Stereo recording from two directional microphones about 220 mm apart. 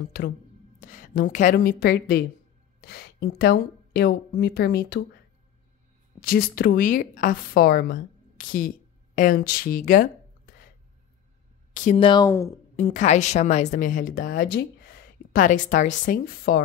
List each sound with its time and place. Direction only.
0.7 s a woman's voice: 35° left (ahead or behind)
6.2 s a woman's voice: 40° left (ahead or behind)
11.7 s speech: 35° left (ahead or behind)
12.1 s speech: 15° left (ahead or behind)
12.7 s a woman's voice: 35° left (ahead or behind)